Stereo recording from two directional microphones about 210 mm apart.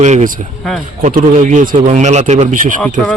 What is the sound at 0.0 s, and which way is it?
Speech, 35° right (ahead or behind).